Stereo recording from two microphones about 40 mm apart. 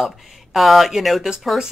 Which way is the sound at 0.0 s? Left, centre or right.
Centre.